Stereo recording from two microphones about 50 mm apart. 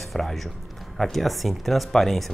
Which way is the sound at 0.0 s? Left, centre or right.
Centre.